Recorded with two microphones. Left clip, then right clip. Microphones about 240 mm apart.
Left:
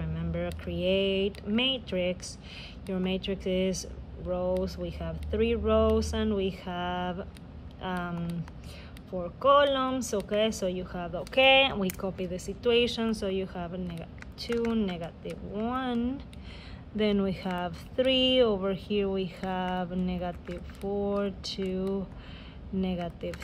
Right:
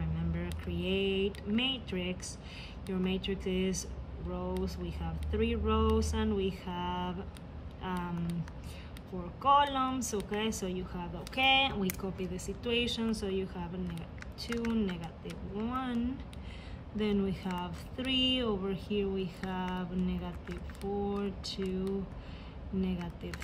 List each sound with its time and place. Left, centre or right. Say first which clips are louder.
0.0 s speech: left 6 dB; centre
9.4 s speech: left 4 dB; centre